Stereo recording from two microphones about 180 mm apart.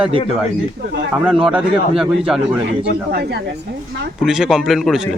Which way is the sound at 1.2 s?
5° right (ahead or behind).